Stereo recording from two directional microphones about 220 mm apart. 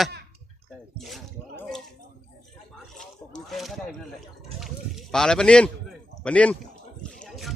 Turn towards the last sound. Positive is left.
turn(degrees=0)  # may be behind; listen again after turning